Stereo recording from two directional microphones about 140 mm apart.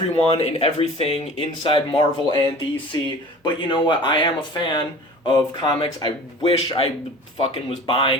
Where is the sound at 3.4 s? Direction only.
35° left (ahead or behind).